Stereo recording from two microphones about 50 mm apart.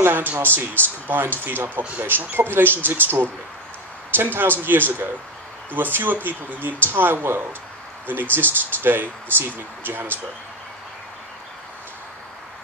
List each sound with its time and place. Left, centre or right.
0.0 s speech: right